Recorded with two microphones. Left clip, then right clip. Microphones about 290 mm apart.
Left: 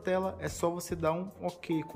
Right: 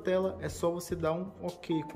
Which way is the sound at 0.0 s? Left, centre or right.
Centre.